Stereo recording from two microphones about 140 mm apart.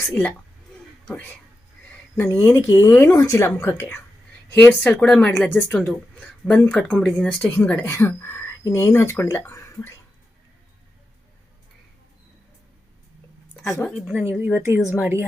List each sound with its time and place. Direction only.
0.1 s a woman's voice: 5° left (ahead or behind)
14.2 s speech: 10° right (ahead or behind)